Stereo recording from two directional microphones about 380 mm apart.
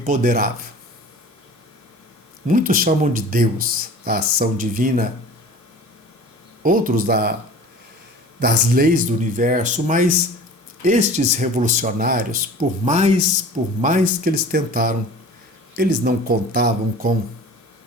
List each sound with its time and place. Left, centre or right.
0.0 s speech: right
2.5 s speech: right
6.6 s speech: right
8.4 s speech: right